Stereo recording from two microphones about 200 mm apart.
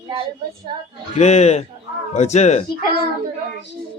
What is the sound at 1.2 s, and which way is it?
Speech, 35° left (ahead or behind).